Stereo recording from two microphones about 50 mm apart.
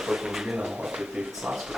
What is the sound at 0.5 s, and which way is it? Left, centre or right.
Speech, right.